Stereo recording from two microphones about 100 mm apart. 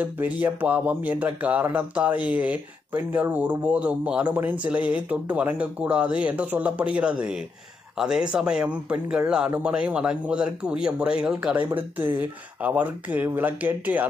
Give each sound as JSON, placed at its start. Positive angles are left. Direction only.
{"t": 0.0, "sound": "speech", "side_deg": -15}